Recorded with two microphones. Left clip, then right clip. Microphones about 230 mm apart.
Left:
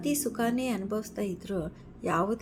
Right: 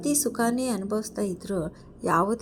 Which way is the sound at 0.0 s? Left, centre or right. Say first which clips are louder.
Right 4 dB; centre.